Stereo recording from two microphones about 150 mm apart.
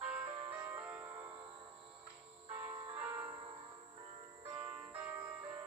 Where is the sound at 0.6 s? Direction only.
10° right (ahead or behind).